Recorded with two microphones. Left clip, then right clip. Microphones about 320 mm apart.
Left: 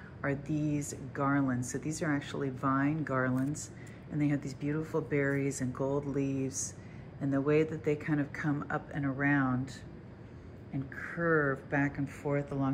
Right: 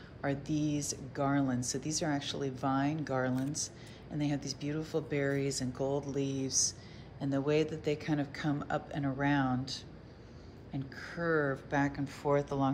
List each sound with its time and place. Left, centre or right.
0.2 s speech: centre
6.1 s speech: right
6.4 s speech: centre
11.0 s speech: centre